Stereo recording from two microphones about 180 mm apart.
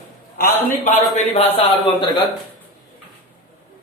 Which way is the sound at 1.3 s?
35° left (ahead or behind).